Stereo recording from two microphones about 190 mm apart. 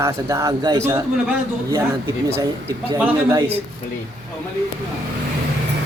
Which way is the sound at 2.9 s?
15° right (ahead or behind).